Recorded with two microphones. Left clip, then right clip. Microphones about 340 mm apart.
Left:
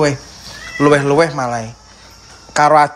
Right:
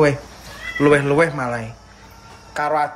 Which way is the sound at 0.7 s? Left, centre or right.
Centre.